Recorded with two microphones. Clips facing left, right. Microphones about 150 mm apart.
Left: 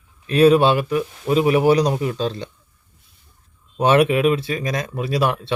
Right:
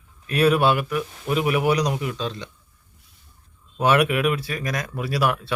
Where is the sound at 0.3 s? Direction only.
25° left (ahead or behind).